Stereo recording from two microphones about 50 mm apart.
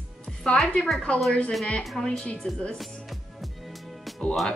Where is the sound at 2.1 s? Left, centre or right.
Left.